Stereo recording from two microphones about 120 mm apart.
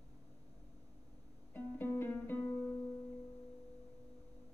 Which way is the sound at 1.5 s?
15° left (ahead or behind).